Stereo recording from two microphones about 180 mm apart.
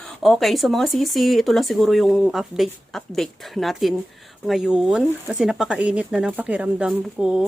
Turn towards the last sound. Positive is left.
turn(degrees=-5)  # may be behind; listen again after turning